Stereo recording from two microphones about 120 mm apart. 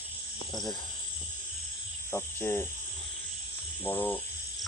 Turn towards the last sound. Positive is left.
turn(degrees=20)  # may be behind; listen again after turning